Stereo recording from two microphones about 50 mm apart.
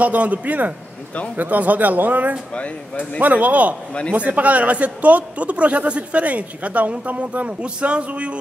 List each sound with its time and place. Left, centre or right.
0.0 s speech: right